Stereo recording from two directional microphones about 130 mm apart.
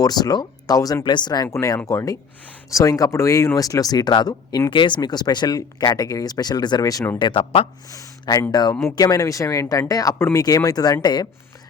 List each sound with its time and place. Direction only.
0.0 s speech: 30° left (ahead or behind)
7.2 s speech: 40° left (ahead or behind)
7.9 s speech: 30° left (ahead or behind)